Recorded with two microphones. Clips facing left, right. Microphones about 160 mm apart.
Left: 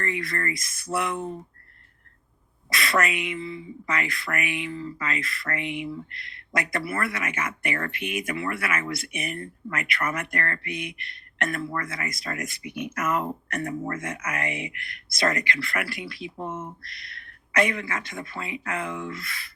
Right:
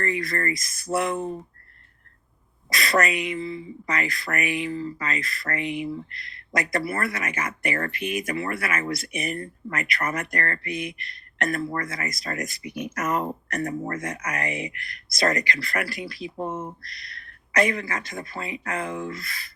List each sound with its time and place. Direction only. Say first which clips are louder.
0.0 s speech: right 3 dB; 40° right (ahead or behind)
2.6 s speech: right 2 dB; 40° right (ahead or behind)